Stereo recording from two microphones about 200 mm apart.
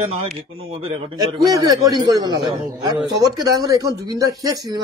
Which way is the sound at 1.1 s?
15° right (ahead or behind).